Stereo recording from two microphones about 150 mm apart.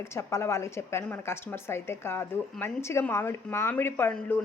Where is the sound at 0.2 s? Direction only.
20° left (ahead or behind).